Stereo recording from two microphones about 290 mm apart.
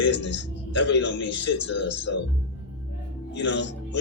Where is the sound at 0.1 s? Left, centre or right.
Left.